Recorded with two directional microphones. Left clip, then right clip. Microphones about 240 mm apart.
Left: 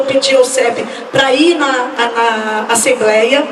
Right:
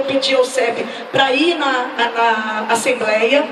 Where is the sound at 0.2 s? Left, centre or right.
Left.